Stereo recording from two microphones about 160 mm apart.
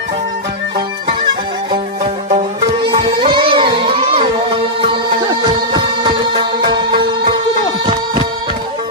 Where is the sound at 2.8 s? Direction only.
30° right (ahead or behind).